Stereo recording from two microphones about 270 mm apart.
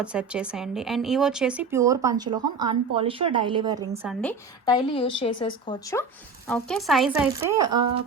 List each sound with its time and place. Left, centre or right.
0.0 s speech: centre
4.1 s speech: centre
4.6 s a woman's voice: centre
6.5 s speech: centre